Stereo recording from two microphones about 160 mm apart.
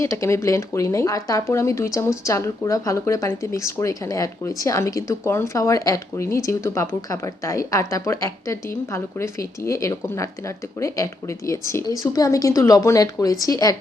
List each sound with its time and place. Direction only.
0.0 s speech: 20° left (ahead or behind)